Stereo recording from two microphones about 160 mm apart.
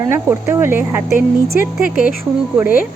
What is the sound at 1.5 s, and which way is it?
Speech, 60° left (ahead or behind).